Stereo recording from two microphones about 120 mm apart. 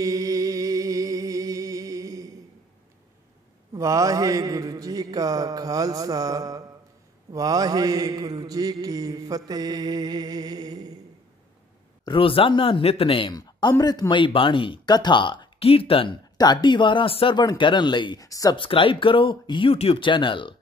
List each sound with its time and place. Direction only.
0.0 s music: 30° right (ahead or behind)
3.7 s a sound: 30° right (ahead or behind)
7.3 s mantra: 30° right (ahead or behind)
12.0 s speech: 45° left (ahead or behind)
13.3 s speech: 35° left (ahead or behind); by 16.2 s 50° left (ahead or behind)
16.3 s speech: 40° left (ahead or behind)
18.6 s speech: 45° left (ahead or behind)